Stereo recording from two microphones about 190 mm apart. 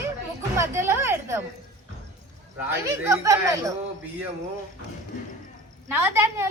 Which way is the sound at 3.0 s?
15° right (ahead or behind).